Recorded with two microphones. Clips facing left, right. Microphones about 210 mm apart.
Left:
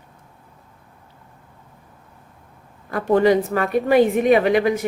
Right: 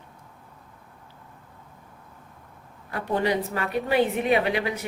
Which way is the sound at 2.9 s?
45° left (ahead or behind).